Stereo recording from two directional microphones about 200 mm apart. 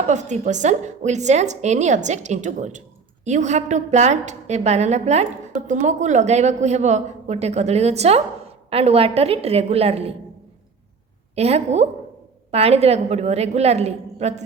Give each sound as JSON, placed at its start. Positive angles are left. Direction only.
{"t": 0.1, "sound": "a woman's voice", "side_deg": -35}
{"t": 11.3, "sound": "a woman's voice", "side_deg": -30}